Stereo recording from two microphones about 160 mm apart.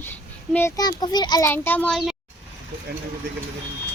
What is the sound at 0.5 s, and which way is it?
Speech, 20° left (ahead or behind).